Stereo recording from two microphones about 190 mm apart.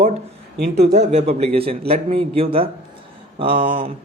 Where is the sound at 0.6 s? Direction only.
60° right (ahead or behind).